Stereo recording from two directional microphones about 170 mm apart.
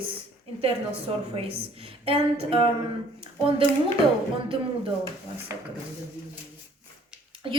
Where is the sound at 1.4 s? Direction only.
35° right (ahead or behind).